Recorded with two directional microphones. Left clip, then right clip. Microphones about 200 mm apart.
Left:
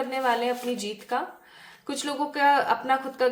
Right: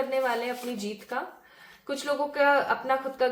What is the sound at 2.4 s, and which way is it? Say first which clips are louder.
Speech: left 2 dB; 30° left (ahead or behind).